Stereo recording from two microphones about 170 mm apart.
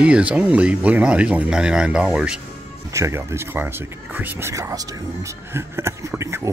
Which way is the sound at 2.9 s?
15° right (ahead or behind).